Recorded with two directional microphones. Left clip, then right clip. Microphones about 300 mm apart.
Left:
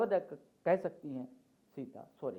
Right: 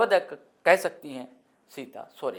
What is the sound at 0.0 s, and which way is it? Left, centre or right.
Speech, centre.